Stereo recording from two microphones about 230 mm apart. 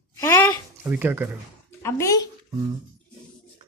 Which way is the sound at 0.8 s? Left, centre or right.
Centre.